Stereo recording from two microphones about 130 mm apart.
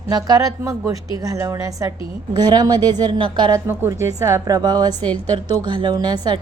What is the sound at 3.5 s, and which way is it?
A woman's voice, 25° right (ahead or behind).